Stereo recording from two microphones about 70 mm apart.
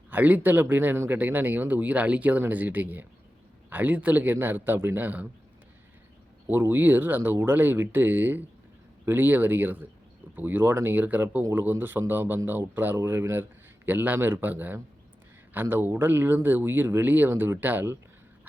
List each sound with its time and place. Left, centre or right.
0.1 s speech: right
6.5 s speech: right